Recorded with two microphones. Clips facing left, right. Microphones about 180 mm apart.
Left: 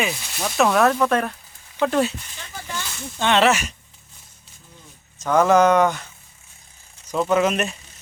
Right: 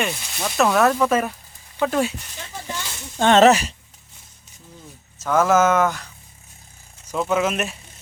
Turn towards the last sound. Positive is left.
turn(degrees=-5)  # may be behind; listen again after turning